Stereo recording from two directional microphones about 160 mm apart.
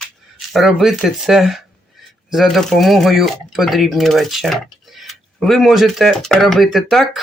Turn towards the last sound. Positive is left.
turn(degrees=0)  # may be behind; listen again after turning